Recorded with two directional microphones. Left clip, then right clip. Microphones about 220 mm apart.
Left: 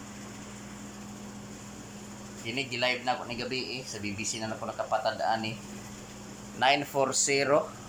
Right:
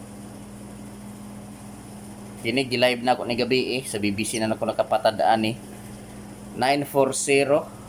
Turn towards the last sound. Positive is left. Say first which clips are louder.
# right 6 dB
turn(degrees=-10)  # may be behind; listen again after turning